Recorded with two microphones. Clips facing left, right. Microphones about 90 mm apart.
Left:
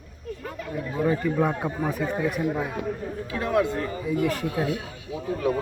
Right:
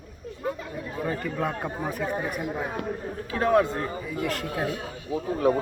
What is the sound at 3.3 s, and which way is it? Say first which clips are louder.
Speech: right 2 dB; 40° right (ahead or behind).